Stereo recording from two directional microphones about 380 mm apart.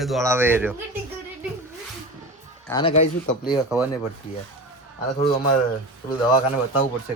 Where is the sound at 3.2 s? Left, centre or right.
Left.